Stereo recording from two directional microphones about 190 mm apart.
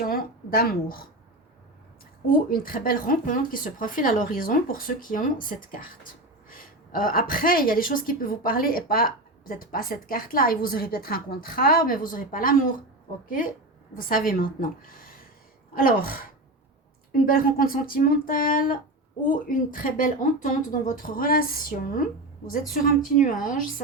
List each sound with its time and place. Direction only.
0.0 s speech: 50° left (ahead or behind)
2.5 s speech: 50° left (ahead or behind)
23.1 s speech: 45° left (ahead or behind)